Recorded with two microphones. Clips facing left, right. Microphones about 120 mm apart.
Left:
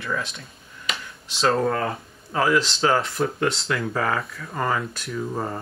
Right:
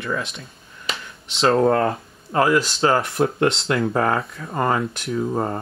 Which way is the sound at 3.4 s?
55° right (ahead or behind).